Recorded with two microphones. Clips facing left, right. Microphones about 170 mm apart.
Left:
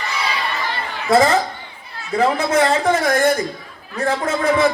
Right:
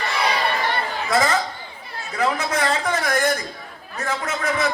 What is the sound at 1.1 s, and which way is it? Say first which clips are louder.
A man's voice: left 7 dB; 30° left (ahead or behind).